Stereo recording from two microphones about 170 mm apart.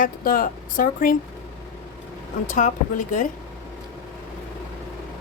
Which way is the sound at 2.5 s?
50° left (ahead or behind).